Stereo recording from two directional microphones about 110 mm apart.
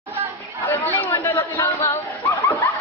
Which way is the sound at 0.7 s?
20° left (ahead or behind).